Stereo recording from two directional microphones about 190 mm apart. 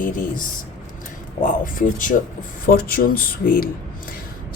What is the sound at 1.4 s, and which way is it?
Speech, 45° left (ahead or behind).